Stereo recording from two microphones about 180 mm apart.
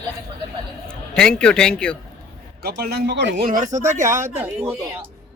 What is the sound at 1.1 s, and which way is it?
Speech, 5° left (ahead or behind).